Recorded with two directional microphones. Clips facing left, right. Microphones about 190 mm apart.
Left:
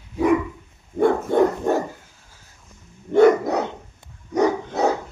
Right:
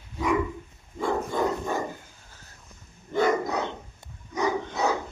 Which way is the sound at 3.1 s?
65° left (ahead or behind).